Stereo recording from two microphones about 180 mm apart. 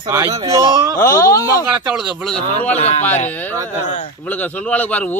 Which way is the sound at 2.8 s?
35° left (ahead or behind).